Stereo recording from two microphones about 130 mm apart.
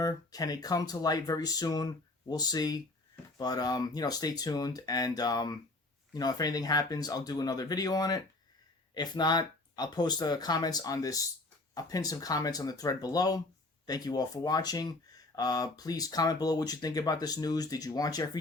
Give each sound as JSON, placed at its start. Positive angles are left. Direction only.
{"t": 0.0, "sound": "speech", "side_deg": 30}